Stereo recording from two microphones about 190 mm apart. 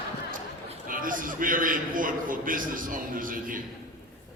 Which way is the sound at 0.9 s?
45° right (ahead or behind).